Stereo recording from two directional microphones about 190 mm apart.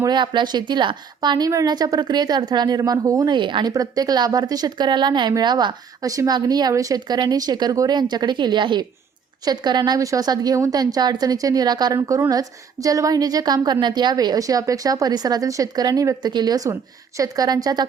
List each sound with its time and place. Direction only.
0.0 s a woman's voice: 25° right (ahead or behind)